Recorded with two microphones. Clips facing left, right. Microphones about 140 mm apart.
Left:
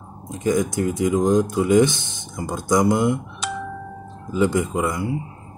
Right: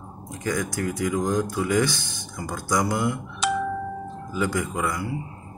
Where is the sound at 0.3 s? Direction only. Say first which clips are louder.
Left 7 dB; 20° left (ahead or behind).